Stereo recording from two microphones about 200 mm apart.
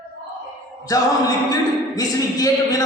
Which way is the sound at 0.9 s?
20° left (ahead or behind).